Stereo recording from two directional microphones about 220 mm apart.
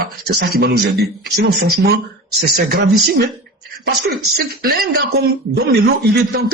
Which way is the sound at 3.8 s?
45° right (ahead or behind).